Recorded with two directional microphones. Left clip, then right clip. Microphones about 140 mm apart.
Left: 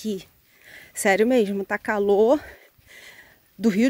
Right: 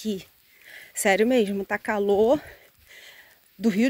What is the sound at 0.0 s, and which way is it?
Speech, 30° left (ahead or behind).